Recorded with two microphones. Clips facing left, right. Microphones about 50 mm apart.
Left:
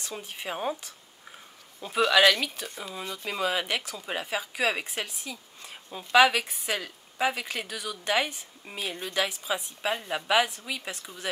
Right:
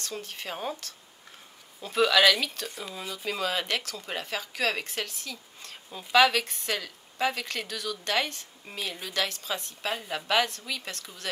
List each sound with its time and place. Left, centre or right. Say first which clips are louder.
0.0 s speech: even; centre